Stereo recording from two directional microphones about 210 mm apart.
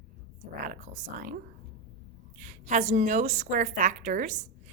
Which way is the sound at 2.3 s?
35° right (ahead or behind).